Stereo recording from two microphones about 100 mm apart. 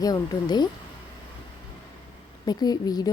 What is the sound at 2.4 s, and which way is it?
Speech, 40° left (ahead or behind).